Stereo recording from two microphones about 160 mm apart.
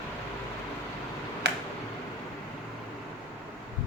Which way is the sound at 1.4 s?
90° right.